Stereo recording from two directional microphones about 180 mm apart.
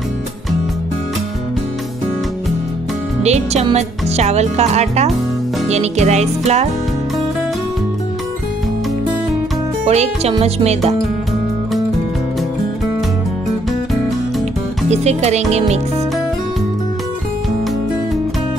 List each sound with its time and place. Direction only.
3.3 s speech: 40° right (ahead or behind)
9.8 s speech: 35° right (ahead or behind)
14.9 s speech: 35° right (ahead or behind)